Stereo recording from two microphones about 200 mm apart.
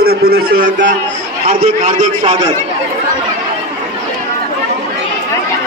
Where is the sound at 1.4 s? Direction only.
35° right (ahead or behind).